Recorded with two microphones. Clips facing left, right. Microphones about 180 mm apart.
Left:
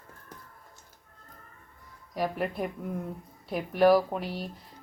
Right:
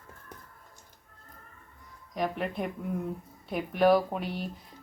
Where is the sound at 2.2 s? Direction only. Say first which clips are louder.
Left 1 dB; 5° left (ahead or behind).